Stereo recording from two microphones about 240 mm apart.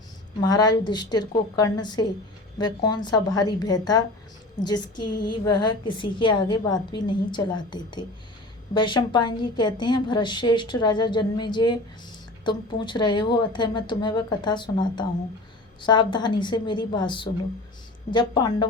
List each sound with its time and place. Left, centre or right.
0.4 s a woman's voice: centre